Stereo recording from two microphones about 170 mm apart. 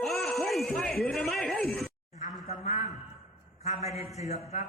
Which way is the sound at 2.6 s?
45° left (ahead or behind).